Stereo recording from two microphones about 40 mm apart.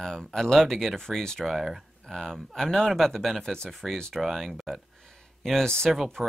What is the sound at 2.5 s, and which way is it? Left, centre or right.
Speech, centre.